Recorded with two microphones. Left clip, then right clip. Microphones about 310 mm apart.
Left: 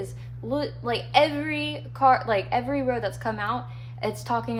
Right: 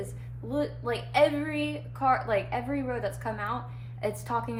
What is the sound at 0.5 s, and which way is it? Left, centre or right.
A woman's voice, left.